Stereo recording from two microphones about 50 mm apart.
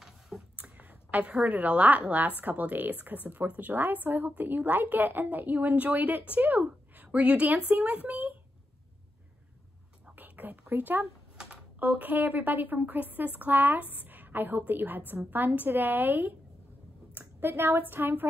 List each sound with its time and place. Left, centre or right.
0.6 s a sound: right
1.4 s a woman's voice: right
10.1 s whispering: right
10.8 s a woman's voice: right